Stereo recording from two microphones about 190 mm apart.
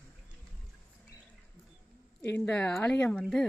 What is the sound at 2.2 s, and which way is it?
Speech, 10° left (ahead or behind).